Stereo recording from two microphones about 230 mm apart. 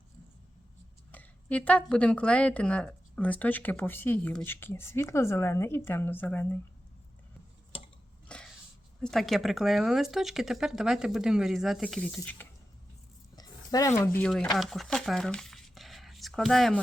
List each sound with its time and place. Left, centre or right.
1.1 s a woman's voice: centre
7.7 s stir: left
8.3 s sneeze: centre
9.0 s speech: centre
13.3 s speech: centre